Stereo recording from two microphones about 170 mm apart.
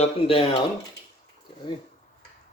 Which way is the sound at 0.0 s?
35° left (ahead or behind).